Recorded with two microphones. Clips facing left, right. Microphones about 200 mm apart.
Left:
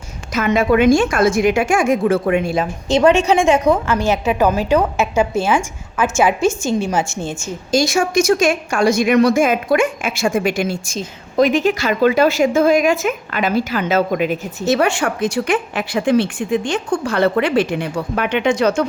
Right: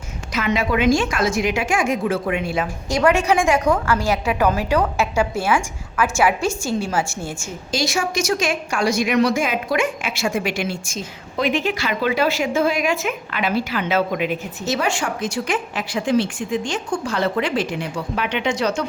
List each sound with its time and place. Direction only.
0.3 s a woman's voice: 50° left (ahead or behind)
2.6 s a woman's voice: 25° left (ahead or behind)
7.7 s a woman's voice: 50° left (ahead or behind)
14.6 s a woman's voice: 60° left (ahead or behind)